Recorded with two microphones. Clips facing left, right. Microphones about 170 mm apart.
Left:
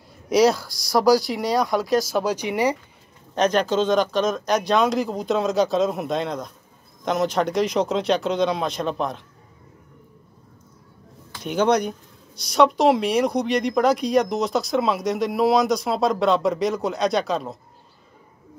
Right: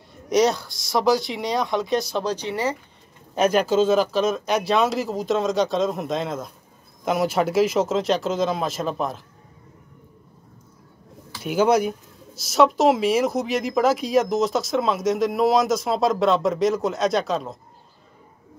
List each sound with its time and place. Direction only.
0.3 s speech: centre (ahead or behind)
0.7 s speech: 20° right (ahead or behind)
0.9 s speech: centre (ahead or behind)
3.3 s speech: 5° right (ahead or behind)
11.3 s speech: 5° right (ahead or behind)